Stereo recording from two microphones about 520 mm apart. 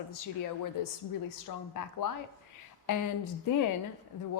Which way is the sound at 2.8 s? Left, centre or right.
Left.